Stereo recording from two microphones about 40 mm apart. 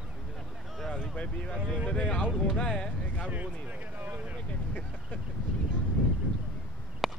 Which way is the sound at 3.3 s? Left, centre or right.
Right.